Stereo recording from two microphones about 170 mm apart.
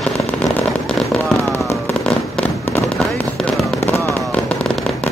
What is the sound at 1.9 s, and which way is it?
Fireworks, 5° left (ahead or behind).